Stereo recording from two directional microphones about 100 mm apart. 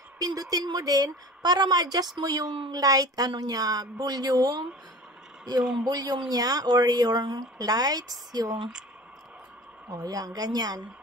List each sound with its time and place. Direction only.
0.2 s a woman's voice: 40° right (ahead or behind)
5.6 s a man's voice: 5° right (ahead or behind)
5.9 s a woman's voice: 40° right (ahead or behind)
8.5 s a man's voice: 5° right (ahead or behind)
9.8 s a woman's voice: 40° right (ahead or behind)